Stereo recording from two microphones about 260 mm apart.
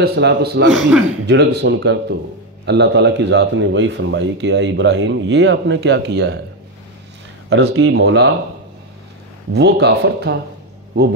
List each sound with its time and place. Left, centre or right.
0.0 s speech: right
7.4 s speech: right
9.5 s speech: right